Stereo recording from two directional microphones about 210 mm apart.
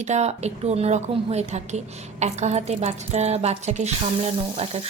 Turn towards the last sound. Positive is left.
turn(degrees=-30)  # may be behind; listen again after turning